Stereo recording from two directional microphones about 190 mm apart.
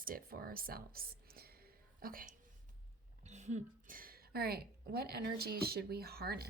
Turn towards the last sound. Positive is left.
turn(degrees=-55)  # may be behind; listen again after turning